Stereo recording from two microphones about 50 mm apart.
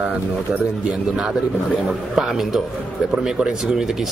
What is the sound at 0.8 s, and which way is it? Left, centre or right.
A man's voice, centre.